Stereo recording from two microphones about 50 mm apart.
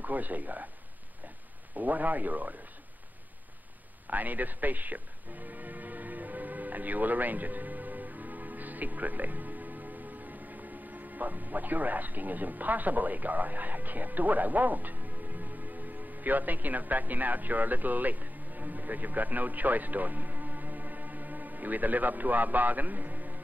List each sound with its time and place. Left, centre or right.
0.0 s a man's voice: right
1.8 s a man's voice: right
4.1 s music: right